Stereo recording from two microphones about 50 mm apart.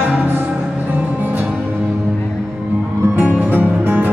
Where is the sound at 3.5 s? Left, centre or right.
Right.